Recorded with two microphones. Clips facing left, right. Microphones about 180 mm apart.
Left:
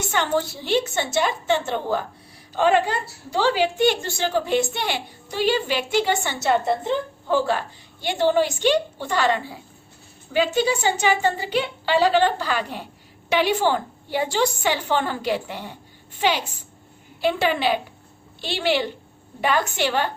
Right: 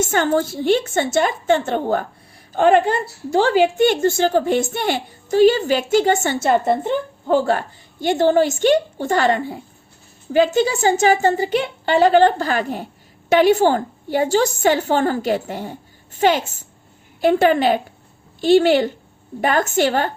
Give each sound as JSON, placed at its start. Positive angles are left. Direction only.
{"t": 0.0, "sound": "a woman's voice", "side_deg": -45}